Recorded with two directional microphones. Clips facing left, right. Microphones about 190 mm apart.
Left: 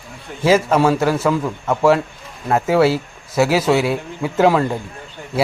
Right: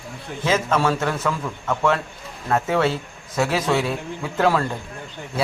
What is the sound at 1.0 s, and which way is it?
A man's voice, 30° left (ahead or behind).